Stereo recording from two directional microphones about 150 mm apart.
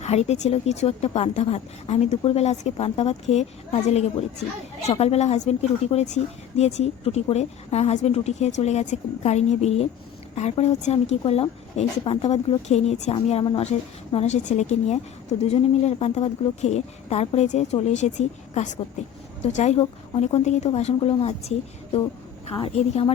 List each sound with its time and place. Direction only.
0.0 s a woman's voice: 45° left (ahead or behind)
13.4 s a woman's voice: 35° left (ahead or behind)
13.7 s a woman's voice: 45° left (ahead or behind)
22.5 s a woman's voice: 40° left (ahead or behind)